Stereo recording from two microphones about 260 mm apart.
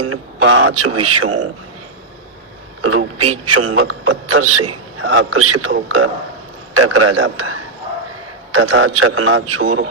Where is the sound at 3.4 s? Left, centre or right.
Right.